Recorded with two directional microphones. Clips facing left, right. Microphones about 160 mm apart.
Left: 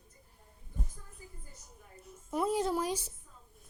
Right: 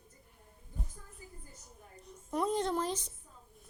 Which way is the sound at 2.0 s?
5° left (ahead or behind).